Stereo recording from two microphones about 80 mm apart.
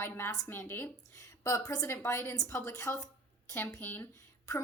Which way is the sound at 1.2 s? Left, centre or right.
Left.